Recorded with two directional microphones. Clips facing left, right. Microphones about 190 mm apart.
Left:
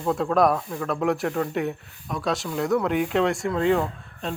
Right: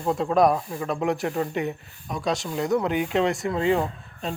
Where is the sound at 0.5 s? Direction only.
15° right (ahead or behind).